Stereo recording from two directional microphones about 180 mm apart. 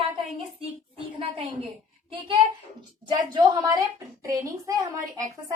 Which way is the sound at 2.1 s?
30° right (ahead or behind).